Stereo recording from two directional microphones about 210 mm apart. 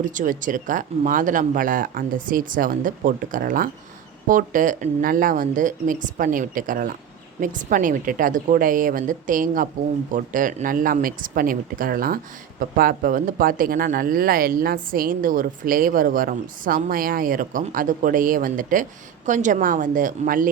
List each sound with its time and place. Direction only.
0.0 s speech: 40° right (ahead or behind)